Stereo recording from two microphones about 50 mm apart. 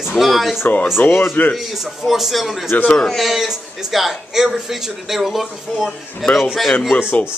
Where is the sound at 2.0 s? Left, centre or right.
Centre.